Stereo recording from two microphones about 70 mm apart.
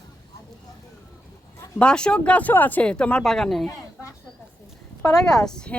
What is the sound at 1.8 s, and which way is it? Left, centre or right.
A woman's voice, centre.